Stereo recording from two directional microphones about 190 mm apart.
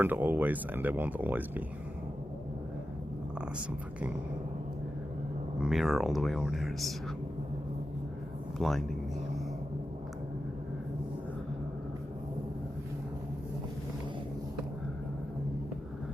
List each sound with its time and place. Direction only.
0.0 s speech: 10° right (ahead or behind)
5.5 s speech: centre (ahead or behind)
8.5 s speech: centre (ahead or behind)